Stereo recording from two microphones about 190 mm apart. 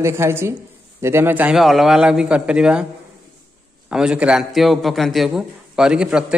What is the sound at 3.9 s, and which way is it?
A man's voice, 5° right (ahead or behind).